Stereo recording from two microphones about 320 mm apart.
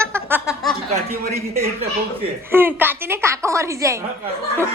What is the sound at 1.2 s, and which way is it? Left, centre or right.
Speech, right.